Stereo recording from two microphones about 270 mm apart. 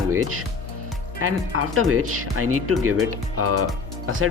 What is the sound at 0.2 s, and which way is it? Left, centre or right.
Speech, right.